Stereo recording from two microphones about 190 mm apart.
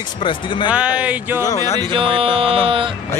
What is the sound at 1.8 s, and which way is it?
Speech, 25° right (ahead or behind).